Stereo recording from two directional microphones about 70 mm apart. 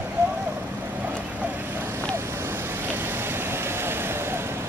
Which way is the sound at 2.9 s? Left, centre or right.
Right.